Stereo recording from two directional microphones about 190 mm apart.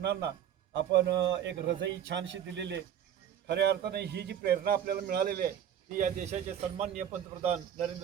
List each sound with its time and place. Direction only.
0.0 s a man's voice: 60° right (ahead or behind); by 7.9 s 35° right (ahead or behind)